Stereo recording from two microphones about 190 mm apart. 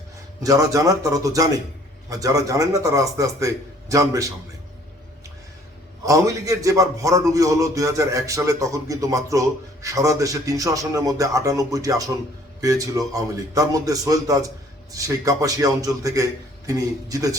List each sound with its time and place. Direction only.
0.4 s a man's voice: 15° right (ahead or behind)
6.1 s a man's voice: 15° right (ahead or behind)